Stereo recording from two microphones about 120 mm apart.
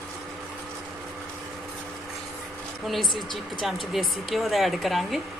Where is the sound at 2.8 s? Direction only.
Centre (ahead or behind).